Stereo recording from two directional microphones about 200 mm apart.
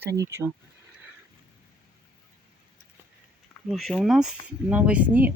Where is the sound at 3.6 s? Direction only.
Centre (ahead or behind).